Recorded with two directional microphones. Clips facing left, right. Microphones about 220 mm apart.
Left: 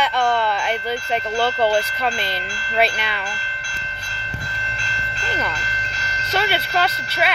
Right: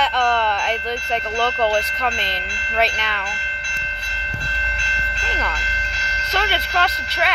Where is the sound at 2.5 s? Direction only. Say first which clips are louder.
Left 1 dB; 20° right (ahead or behind).